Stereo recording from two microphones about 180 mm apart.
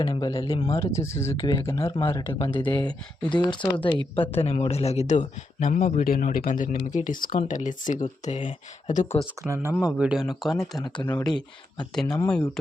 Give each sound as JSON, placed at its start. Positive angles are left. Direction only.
{"t": 0.0, "sound": "speech", "side_deg": 20}
{"t": 1.4, "sound": "a man's voice", "side_deg": 25}
{"t": 9.7, "sound": "speech", "side_deg": -5}
{"t": 10.6, "sound": "speech", "side_deg": 20}
{"t": 12.1, "sound": "speech", "side_deg": 5}